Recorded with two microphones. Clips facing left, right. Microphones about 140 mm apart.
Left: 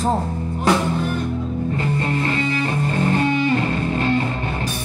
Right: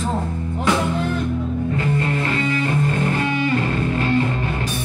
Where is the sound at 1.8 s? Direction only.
30° left (ahead or behind).